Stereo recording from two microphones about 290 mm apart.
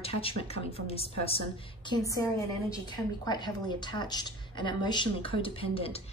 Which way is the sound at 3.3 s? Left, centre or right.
Centre.